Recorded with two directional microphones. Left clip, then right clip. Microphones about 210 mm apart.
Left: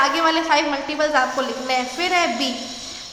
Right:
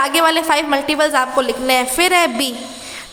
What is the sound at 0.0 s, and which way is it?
A woman's voice, 55° right (ahead or behind).